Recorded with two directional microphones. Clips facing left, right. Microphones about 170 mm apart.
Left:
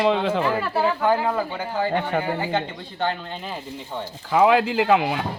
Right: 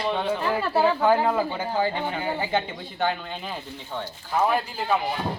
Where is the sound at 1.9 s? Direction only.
60° left (ahead or behind).